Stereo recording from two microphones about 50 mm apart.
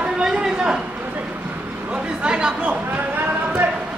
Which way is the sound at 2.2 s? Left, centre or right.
Centre.